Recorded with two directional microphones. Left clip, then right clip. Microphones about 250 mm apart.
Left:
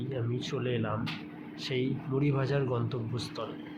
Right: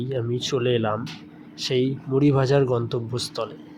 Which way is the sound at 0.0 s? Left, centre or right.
Right.